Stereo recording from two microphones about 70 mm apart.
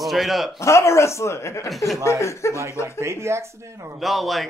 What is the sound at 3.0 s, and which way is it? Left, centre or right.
Speech, right.